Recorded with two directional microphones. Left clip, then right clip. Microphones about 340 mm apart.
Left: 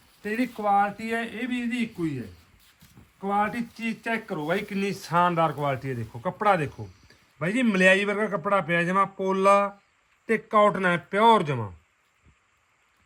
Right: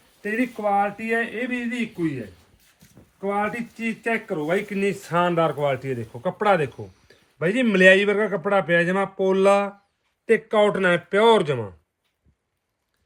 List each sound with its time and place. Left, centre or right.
0.2 s speech: centre